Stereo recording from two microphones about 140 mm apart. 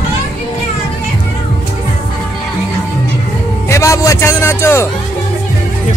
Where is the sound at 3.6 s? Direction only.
20° left (ahead or behind).